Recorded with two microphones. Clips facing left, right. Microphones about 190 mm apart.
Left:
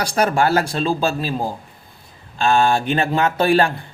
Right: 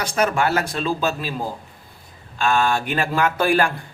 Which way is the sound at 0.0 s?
35° left (ahead or behind).